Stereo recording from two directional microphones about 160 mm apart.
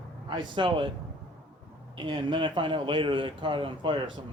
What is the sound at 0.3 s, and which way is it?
Speech, 30° right (ahead or behind).